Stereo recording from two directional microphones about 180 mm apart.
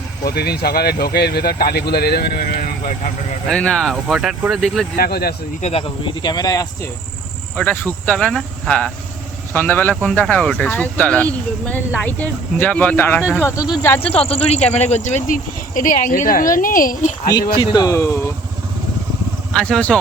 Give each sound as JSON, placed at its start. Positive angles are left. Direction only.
{"t": 0.3, "sound": "speech", "side_deg": 60}
{"t": 3.4, "sound": "speech", "side_deg": 5}
{"t": 4.9, "sound": "speech", "side_deg": 60}
{"t": 5.6, "sound": "speech", "side_deg": 30}
{"t": 7.5, "sound": "speech", "side_deg": 10}
{"t": 14.3, "sound": "speech", "side_deg": 35}
{"t": 17.5, "sound": "speech", "side_deg": 25}
{"t": 19.5, "sound": "speech", "side_deg": 5}